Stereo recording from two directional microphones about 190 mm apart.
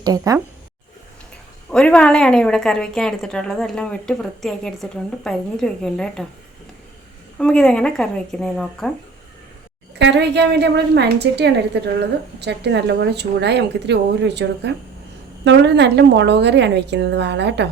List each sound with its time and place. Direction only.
0.0 s speech: 20° right (ahead or behind)
1.7 s a woman's voice: 5° left (ahead or behind)
7.3 s a woman's voice: 5° left (ahead or behind)
10.0 s a woman's voice: 65° right (ahead or behind)